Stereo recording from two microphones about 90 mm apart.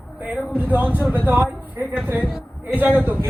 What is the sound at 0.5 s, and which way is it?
Speech, 20° right (ahead or behind).